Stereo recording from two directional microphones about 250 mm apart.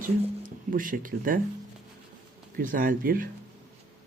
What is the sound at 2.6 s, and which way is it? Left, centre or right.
Speech, right.